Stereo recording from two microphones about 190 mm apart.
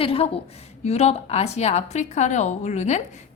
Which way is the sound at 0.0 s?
30° left (ahead or behind).